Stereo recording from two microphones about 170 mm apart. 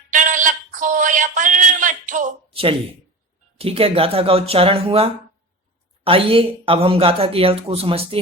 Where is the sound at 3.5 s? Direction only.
35° right (ahead or behind).